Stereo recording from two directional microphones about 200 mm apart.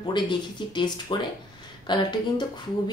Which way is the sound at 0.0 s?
25° left (ahead or behind).